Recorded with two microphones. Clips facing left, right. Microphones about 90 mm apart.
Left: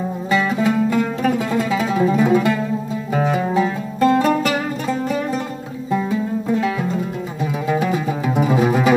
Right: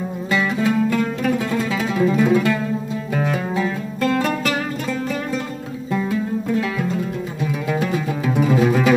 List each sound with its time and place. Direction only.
0.3 s music: 10° left (ahead or behind)
0.7 s music: 20° left (ahead or behind)
1.7 s music: 15° left (ahead or behind)